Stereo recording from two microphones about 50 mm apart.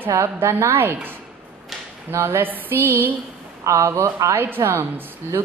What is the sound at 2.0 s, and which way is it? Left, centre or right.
Speech, right.